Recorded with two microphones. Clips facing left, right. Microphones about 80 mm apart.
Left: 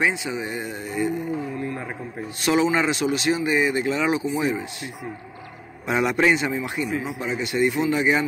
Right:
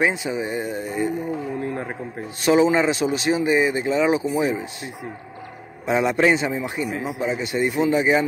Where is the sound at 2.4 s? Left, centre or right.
Right.